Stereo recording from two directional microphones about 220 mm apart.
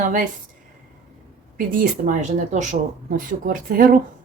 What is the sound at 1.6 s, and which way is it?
Speech, 40° right (ahead or behind).